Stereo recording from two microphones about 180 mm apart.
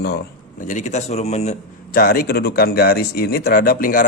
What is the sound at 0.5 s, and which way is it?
A man's voice, 45° left (ahead or behind).